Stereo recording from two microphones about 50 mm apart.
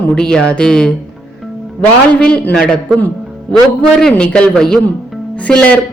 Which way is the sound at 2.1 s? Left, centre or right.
Left.